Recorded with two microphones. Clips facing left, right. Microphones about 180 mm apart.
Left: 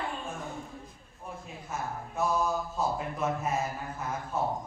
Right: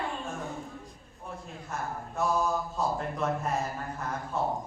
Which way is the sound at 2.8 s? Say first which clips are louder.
Right 1 dB; 5° left (ahead or behind).